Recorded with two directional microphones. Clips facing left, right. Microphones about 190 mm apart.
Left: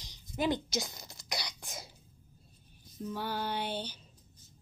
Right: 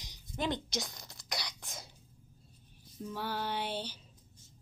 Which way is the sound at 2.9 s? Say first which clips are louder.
Left 2 dB; centre (ahead or behind).